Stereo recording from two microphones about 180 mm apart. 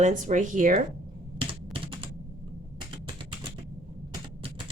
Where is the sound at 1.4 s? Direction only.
30° right (ahead or behind).